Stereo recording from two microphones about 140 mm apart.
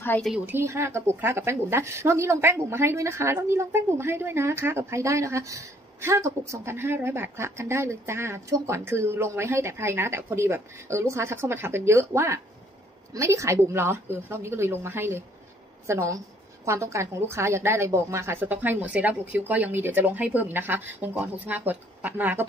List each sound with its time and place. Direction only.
0.0 s a woman's voice: 15° left (ahead or behind)
0.5 s a woman's voice: 15° right (ahead or behind)